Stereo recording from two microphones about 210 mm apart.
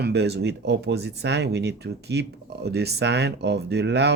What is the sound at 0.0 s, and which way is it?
Speech, 55° right (ahead or behind).